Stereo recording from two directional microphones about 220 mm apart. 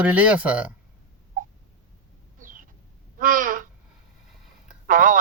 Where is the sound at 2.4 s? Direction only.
35° right (ahead or behind).